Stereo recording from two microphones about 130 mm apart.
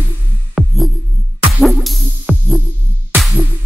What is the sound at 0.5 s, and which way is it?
Music, centre (ahead or behind).